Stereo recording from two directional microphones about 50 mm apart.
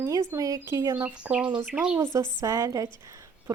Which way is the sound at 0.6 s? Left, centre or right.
Right.